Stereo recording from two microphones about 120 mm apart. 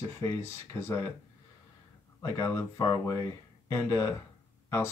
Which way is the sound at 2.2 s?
25° left (ahead or behind).